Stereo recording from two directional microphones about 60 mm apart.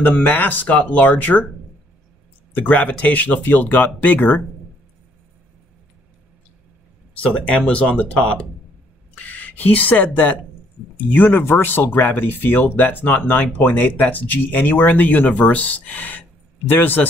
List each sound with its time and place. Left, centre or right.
0.0 s speech: left
2.5 s speech: left
7.2 s speech: left